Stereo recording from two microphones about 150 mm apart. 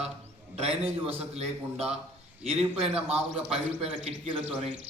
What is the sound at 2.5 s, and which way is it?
A man's voice, 40° right (ahead or behind).